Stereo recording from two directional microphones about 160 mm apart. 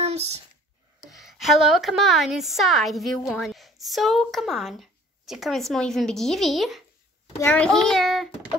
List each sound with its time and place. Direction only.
0.0 s a sound: 40° right (ahead or behind)
1.1 s a woman's voice: centre (ahead or behind)
7.3 s a woman's voice: 10° left (ahead or behind)